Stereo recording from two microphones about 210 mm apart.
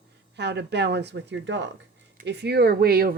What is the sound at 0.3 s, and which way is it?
A woman's voice, 55° right (ahead or behind).